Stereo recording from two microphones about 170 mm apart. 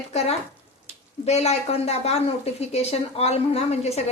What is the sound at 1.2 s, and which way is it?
A woman's voice, 40° left (ahead or behind).